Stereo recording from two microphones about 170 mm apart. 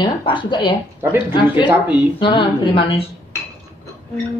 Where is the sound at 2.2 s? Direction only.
30° left (ahead or behind).